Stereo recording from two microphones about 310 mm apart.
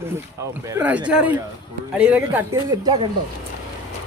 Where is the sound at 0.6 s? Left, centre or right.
Centre.